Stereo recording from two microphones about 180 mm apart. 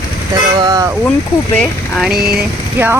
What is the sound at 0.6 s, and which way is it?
Speech, 20° right (ahead or behind).